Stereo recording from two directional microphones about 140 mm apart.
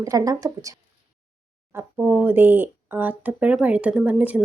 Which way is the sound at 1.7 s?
15° right (ahead or behind).